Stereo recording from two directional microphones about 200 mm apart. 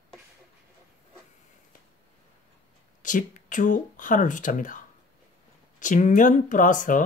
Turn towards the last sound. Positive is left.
turn(degrees=40)  # may be behind; listen again after turning